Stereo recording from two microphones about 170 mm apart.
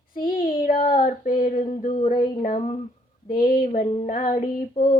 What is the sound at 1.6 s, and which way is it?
Female singing, 45° left (ahead or behind).